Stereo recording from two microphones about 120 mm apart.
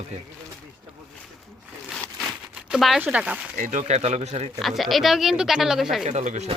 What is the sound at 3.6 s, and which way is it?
Speech, 90° right.